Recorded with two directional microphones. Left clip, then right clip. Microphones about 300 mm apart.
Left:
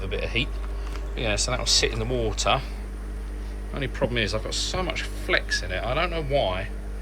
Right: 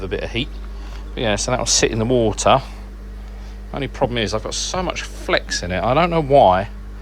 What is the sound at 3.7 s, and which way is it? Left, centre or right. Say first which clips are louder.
Speech: right 6 dB; centre.